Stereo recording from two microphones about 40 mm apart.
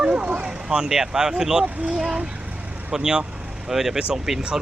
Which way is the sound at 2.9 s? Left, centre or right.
Centre.